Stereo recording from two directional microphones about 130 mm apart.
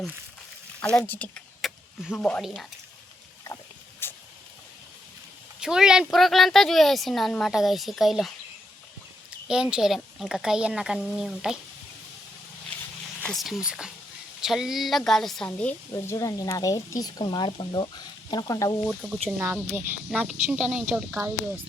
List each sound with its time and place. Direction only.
0.9 s speech: 15° left (ahead or behind)
1.6 s a sound: centre (ahead or behind)
4.0 s a sound: 15° left (ahead or behind)
5.5 s speech: 5° right (ahead or behind)
9.5 s speech: 5° right (ahead or behind)
13.2 s speech: centre (ahead or behind)
16.1 s speech: 25° left (ahead or behind)
18.9 s speech: 10° right (ahead or behind)
21.1 s speech: 20° right (ahead or behind)